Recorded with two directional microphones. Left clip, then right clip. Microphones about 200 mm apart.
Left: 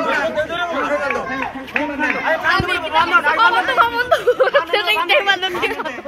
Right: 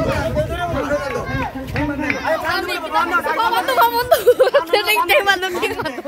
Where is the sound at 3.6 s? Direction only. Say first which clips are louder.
Even; 40° right (ahead or behind); by 5.4 s 60° right (ahead or behind).